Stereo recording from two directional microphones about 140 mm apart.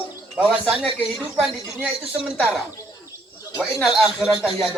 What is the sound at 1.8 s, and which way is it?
Speech, 10° right (ahead or behind).